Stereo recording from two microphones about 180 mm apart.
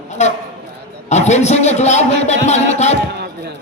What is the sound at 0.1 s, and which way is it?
A man's voice, 40° left (ahead or behind).